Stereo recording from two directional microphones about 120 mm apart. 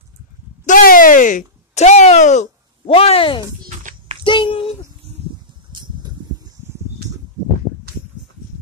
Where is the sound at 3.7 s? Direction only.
90° right.